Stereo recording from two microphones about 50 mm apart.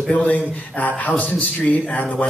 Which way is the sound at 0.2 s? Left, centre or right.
Left.